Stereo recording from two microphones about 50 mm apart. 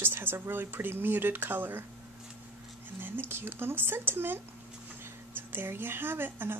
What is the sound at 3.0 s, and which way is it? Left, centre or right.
A woman's voice, right.